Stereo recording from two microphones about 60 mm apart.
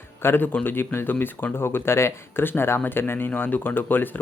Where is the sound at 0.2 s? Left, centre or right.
Left.